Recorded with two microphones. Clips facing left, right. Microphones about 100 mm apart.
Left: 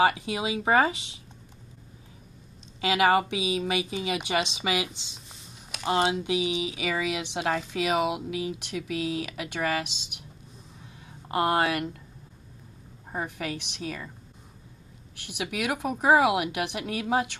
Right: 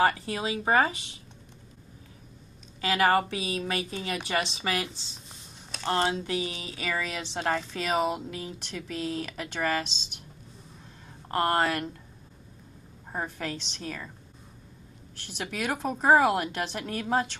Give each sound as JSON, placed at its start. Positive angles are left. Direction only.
{"t": 0.0, "sound": "speech", "side_deg": 15}
{"t": 0.9, "sound": "speech", "side_deg": 90}
{"t": 2.8, "sound": "speech", "side_deg": 20}
{"t": 11.1, "sound": "speech", "side_deg": 10}
{"t": 13.1, "sound": "speech", "side_deg": 5}
{"t": 15.3, "sound": "speech", "side_deg": 10}